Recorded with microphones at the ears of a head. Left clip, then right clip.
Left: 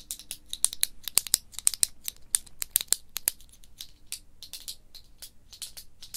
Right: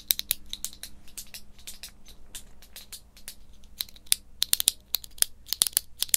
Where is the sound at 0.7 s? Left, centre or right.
Left.